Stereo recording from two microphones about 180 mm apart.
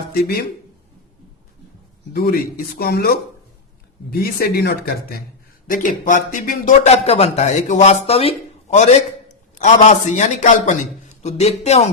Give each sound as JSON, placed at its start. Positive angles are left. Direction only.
{"t": 0.1, "sound": "speech", "side_deg": 55}
{"t": 2.1, "sound": "a man's voice", "side_deg": 55}